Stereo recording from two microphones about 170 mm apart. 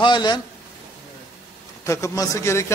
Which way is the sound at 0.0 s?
25° left (ahead or behind).